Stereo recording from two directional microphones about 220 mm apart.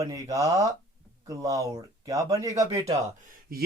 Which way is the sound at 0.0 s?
15° right (ahead or behind).